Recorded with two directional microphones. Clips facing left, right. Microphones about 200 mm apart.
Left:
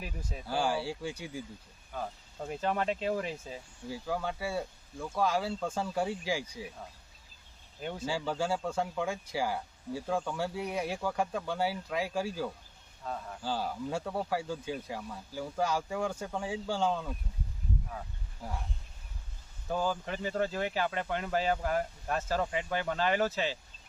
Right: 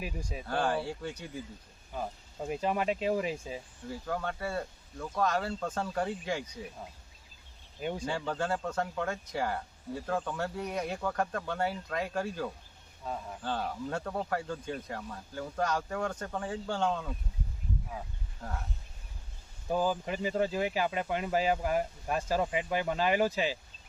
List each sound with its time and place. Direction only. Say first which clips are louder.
0.0 s speech: right 3 dB; 10° right (ahead or behind)
0.4 s speech: even; 5° left (ahead or behind)
1.9 s speech: right 1 dB; 10° right (ahead or behind)
3.8 s speech: left 1 dB; 5° left (ahead or behind)
7.8 s speech: right 3 dB; 15° right (ahead or behind)
8.0 s speech: left 3 dB; 5° left (ahead or behind)
13.1 s speech: right 1 dB; 10° right (ahead or behind)
13.4 s speech: left 1 dB; 5° left (ahead or behind)
18.4 s speech: even; 5° left (ahead or behind)
19.6 s speech: right 2 dB; 10° right (ahead or behind)